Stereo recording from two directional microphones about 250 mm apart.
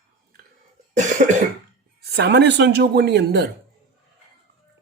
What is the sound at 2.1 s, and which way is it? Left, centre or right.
Speech, right.